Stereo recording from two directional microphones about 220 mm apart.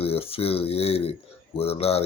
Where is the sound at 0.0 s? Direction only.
25° left (ahead or behind).